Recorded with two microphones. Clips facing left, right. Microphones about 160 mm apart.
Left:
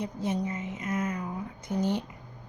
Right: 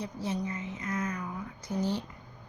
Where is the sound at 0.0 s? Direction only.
55° left (ahead or behind).